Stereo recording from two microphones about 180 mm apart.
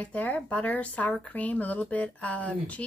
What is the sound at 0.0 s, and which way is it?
Speech, 10° left (ahead or behind).